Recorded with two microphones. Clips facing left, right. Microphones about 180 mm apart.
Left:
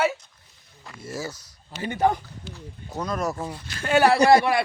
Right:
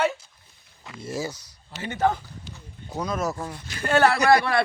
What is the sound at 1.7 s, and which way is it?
Speech, 10° left (ahead or behind).